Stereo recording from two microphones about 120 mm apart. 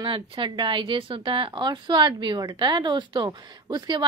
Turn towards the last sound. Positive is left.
turn(degrees=-40)  # may be behind; listen again after turning